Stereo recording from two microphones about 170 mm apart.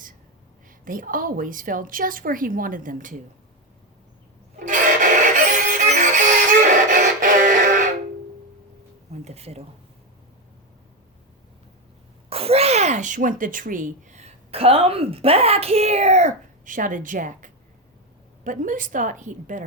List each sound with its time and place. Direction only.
0.9 s a woman's voice: 55° right (ahead or behind)
4.6 s train: 50° right (ahead or behind)
5.8 s music: 50° right (ahead or behind)
9.2 s speech: 40° right (ahead or behind)
12.3 s a woman's voice: 35° right (ahead or behind)